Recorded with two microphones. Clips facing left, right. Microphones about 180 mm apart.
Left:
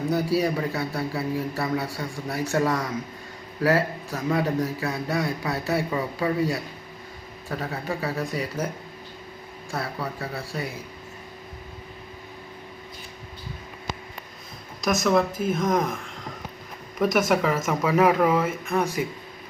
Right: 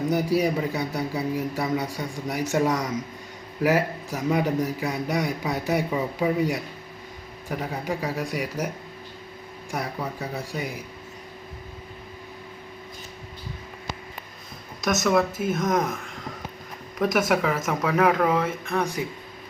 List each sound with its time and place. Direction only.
0.1 s a man's voice: 20° right (ahead or behind)
9.7 s a man's voice: 15° right (ahead or behind)
14.8 s a man's voice: centre (ahead or behind)
17.0 s a man's voice: 5° right (ahead or behind)